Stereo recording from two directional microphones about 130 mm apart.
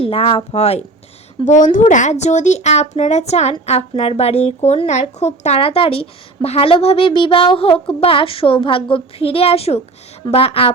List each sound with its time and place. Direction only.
0.0 s speech: 45° left (ahead or behind)
1.5 s speech: 80° left; by 10.8 s 50° left (ahead or behind)